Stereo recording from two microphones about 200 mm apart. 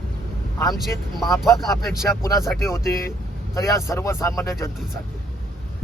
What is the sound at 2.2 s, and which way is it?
Speech, 15° left (ahead or behind).